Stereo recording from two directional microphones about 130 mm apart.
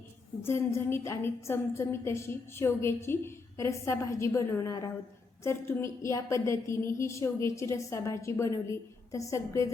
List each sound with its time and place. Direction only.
0.4 s a woman's voice: 20° left (ahead or behind)